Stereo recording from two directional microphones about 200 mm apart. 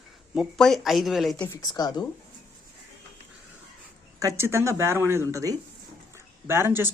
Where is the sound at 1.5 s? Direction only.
20° left (ahead or behind).